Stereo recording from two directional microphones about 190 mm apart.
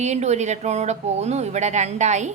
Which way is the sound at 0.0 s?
35° right (ahead or behind).